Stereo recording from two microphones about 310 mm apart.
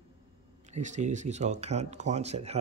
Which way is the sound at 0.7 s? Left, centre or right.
Right.